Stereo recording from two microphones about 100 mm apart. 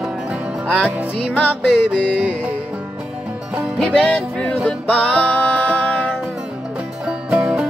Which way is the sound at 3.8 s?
10° left (ahead or behind).